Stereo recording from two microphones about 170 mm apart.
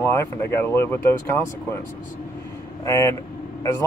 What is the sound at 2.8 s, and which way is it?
Speech, 20° left (ahead or behind).